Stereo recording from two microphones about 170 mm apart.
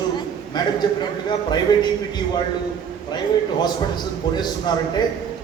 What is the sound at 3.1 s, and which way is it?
A man's voice, 25° left (ahead or behind).